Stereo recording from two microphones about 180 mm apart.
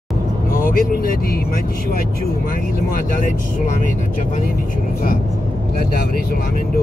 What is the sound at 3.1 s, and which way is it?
Speech, 45° left (ahead or behind).